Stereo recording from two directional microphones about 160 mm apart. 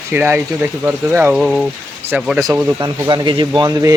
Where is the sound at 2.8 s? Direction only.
25° right (ahead or behind).